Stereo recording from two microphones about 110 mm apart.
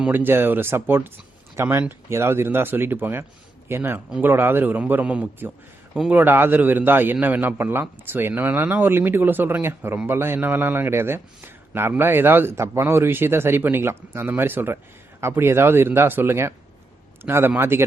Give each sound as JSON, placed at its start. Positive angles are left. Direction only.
{"t": 0.1, "sound": "a man's voice", "side_deg": -20}